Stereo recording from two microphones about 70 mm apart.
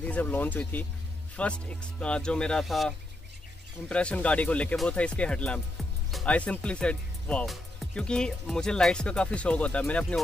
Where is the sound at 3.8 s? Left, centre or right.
Centre.